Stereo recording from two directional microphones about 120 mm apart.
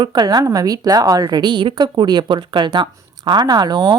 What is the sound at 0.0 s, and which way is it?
A woman's voice, 35° right (ahead or behind).